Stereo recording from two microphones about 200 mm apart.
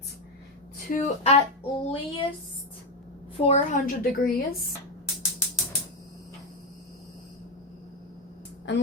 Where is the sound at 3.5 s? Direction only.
45° left (ahead or behind).